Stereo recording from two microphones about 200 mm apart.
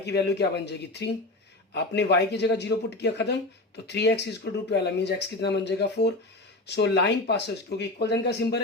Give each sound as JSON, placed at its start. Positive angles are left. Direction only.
{"t": 0.0, "sound": "speech", "side_deg": 55}